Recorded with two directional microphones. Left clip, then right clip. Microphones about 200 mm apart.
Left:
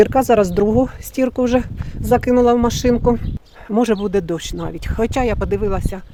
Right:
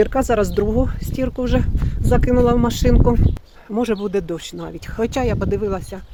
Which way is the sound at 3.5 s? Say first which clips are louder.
Left 5 dB; 35° left (ahead or behind).